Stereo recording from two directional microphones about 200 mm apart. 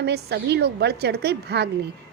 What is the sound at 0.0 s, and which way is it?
A woman's voice, 55° right (ahead or behind).